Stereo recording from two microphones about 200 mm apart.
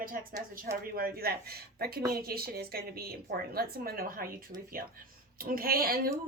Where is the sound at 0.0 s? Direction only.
45° right (ahead or behind).